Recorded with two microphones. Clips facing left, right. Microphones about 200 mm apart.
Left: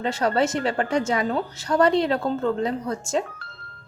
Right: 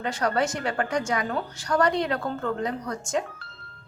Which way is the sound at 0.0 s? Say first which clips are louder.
Left 3 dB; 25° left (ahead or behind).